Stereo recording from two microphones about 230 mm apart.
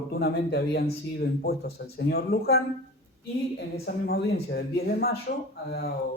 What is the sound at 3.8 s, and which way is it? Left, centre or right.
Speech, left.